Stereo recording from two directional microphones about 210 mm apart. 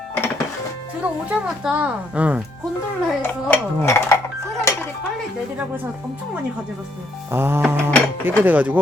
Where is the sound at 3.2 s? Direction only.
10° left (ahead or behind).